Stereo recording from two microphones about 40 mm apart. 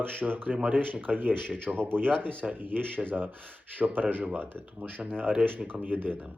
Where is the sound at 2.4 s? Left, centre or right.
Right.